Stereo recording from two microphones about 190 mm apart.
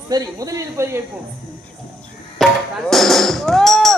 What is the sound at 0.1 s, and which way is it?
Speech, 20° right (ahead or behind).